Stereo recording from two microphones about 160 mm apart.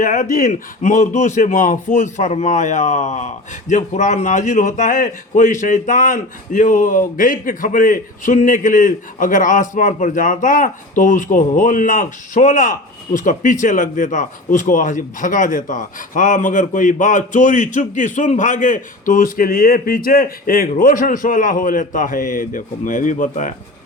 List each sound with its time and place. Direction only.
0.0 s a man's voice: 50° left (ahead or behind)